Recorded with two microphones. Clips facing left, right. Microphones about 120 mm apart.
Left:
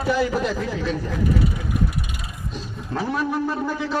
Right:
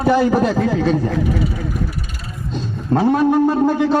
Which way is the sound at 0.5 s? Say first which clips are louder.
Right 9 dB; 70° right (ahead or behind).